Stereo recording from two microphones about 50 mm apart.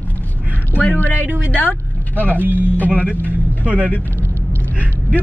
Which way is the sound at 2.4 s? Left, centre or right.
Right.